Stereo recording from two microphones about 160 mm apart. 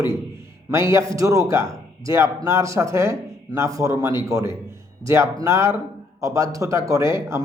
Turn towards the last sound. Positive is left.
turn(degrees=-20)  # may be behind; listen again after turning